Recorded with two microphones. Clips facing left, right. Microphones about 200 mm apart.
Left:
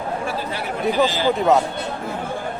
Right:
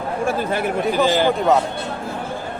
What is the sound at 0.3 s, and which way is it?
Speech, 50° right (ahead or behind).